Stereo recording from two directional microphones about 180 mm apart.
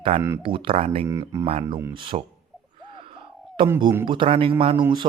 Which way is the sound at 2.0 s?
30° right (ahead or behind).